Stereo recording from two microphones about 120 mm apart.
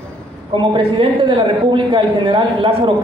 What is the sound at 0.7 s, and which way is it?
A man's voice, 45° right (ahead or behind).